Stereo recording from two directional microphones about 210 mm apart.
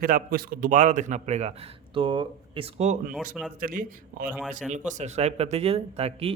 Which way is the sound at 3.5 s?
40° right (ahead or behind).